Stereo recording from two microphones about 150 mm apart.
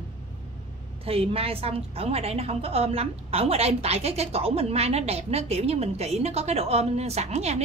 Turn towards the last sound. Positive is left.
turn(degrees=-45)  # may be behind; listen again after turning